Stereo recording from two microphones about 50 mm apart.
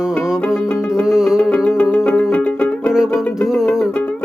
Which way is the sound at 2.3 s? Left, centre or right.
Left.